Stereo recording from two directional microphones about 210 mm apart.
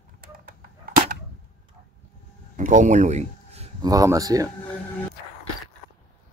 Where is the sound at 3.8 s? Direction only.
15° right (ahead or behind).